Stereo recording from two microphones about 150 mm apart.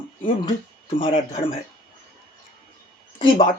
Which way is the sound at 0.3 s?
35° left (ahead or behind).